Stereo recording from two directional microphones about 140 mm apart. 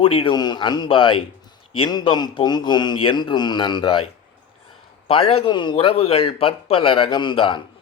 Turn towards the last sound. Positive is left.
turn(degrees=35)  # may be behind; listen again after turning